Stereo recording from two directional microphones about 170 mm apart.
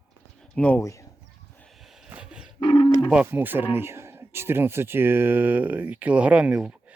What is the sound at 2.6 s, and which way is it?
Speech, 30° left (ahead or behind).